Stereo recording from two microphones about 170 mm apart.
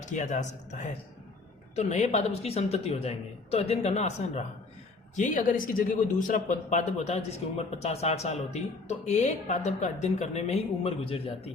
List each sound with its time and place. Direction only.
0.0 s speech: 45° left (ahead or behind)